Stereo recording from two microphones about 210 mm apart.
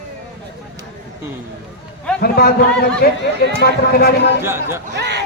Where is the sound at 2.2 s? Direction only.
45° left (ahead or behind).